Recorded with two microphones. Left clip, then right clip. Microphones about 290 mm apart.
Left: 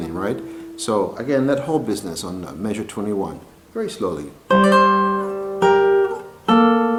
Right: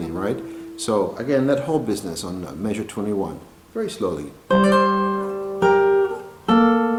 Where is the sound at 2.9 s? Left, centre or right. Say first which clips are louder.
Left 1 dB; left.